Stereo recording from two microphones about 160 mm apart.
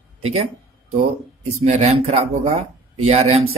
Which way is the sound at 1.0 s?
50° right (ahead or behind).